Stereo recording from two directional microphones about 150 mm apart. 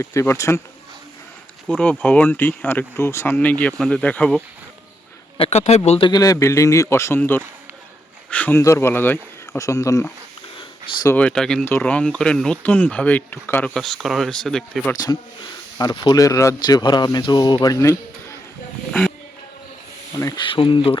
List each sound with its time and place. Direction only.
0.0 s speech: 20° left (ahead or behind)
1.6 s speech: 10° left (ahead or behind)
5.4 s speech: 45° left (ahead or behind)
6.1 s speech: 25° left (ahead or behind)
13.7 s speech: centre (ahead or behind)
14.9 s speech: 25° left (ahead or behind)
18.9 s a sound: 5° left (ahead or behind)
20.1 s speech: 20° left (ahead or behind)
20.4 s speech: 35° left (ahead or behind)